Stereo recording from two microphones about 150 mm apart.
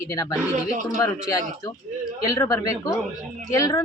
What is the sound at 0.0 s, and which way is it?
Speech, 20° left (ahead or behind).